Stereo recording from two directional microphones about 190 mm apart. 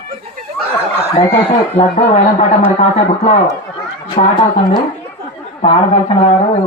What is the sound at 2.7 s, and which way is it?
Speech, 35° left (ahead or behind).